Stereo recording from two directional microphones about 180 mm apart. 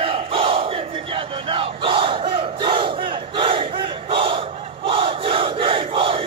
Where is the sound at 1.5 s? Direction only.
30° right (ahead or behind).